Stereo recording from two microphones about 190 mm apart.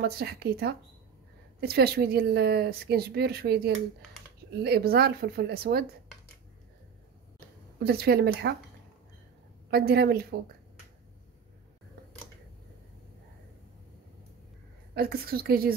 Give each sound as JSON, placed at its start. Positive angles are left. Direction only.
{"t": 0.0, "sound": "a woman's voice", "side_deg": -55}
{"t": 7.3, "sound": "speech", "side_deg": -55}
{"t": 9.7, "sound": "a woman's voice", "side_deg": -55}
{"t": 15.0, "sound": "a woman's voice", "side_deg": -50}